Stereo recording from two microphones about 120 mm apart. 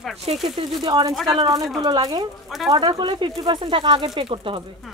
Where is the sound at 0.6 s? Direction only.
40° right (ahead or behind).